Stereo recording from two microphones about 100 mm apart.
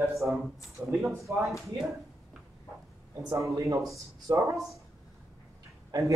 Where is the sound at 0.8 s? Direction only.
15° right (ahead or behind).